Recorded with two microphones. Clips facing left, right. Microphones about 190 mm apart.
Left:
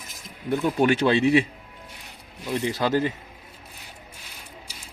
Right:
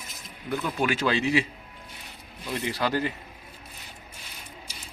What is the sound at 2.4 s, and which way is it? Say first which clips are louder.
Speech: left 4 dB; 20° left (ahead or behind).